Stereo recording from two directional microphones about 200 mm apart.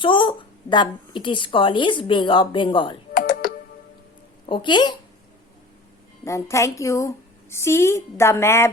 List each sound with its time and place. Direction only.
0.0 s a woman's voice: 25° left (ahead or behind)
3.2 s computer keyboard: 45° left (ahead or behind)
4.4 s a woman's voice: 25° left (ahead or behind)
6.2 s a woman's voice: 15° left (ahead or behind)